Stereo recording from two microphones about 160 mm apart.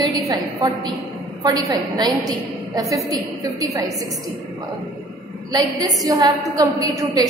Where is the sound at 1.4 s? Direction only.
25° right (ahead or behind).